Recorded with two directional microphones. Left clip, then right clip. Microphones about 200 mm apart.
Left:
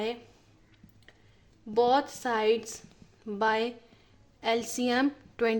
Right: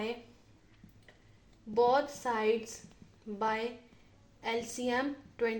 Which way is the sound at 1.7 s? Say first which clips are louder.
Left 3 dB; 50° left (ahead or behind).